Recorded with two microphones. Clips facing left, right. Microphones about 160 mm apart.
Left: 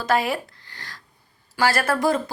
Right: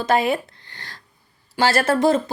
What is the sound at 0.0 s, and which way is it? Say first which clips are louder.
A woman's voice: right 3 dB; 20° right (ahead or behind).